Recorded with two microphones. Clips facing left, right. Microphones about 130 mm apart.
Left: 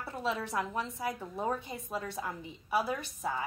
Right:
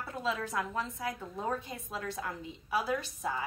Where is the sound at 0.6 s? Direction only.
15° left (ahead or behind).